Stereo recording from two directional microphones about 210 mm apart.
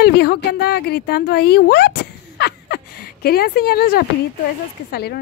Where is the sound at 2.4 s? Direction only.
50° left (ahead or behind).